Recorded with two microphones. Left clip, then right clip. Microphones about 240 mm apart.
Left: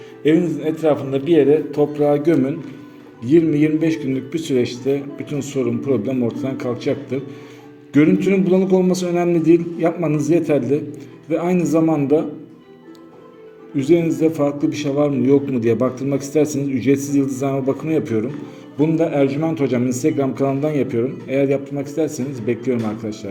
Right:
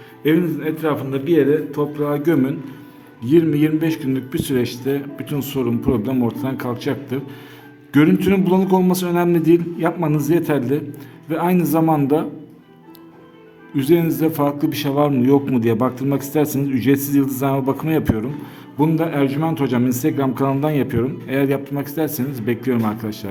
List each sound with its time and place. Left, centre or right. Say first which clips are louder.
0.3 s a man's voice: left 1 dB; centre
13.7 s a man's voice: left 1 dB; right